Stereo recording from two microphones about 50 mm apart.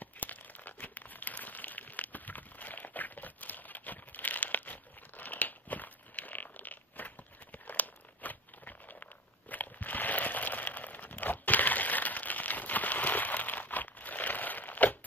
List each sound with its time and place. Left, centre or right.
0.0 s crumpling: left
7.5 s a sound: left
9.5 s crumpling: left